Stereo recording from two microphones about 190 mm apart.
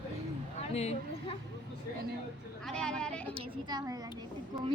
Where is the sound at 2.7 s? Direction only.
5° left (ahead or behind).